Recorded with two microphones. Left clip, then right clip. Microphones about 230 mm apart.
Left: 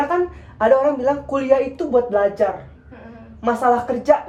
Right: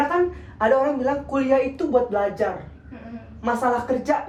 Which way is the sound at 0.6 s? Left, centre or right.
Left.